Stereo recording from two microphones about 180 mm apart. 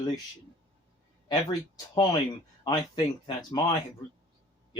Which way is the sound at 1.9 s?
25° left (ahead or behind).